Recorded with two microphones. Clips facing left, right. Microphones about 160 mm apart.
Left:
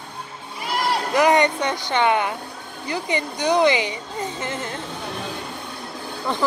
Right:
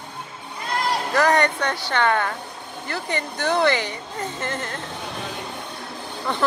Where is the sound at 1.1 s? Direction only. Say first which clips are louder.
Left 2 dB; 20° left (ahead or behind).